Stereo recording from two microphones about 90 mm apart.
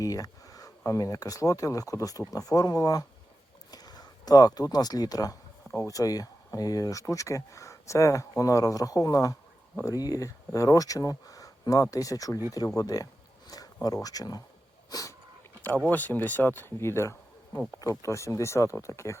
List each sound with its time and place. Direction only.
0.0 s speech: 40° left (ahead or behind)
15.9 s speech: 20° left (ahead or behind)